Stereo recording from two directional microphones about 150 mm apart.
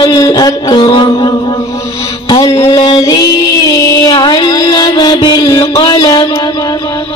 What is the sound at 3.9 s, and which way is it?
Music, 30° left (ahead or behind).